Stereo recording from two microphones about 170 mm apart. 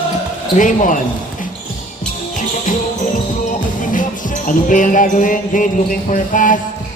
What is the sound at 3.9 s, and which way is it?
Music, 50° left (ahead or behind).